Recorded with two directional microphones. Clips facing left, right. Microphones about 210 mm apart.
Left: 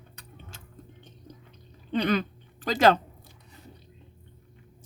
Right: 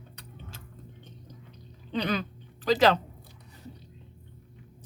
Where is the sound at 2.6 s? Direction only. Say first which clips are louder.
Left 1 dB; 50° left (ahead or behind).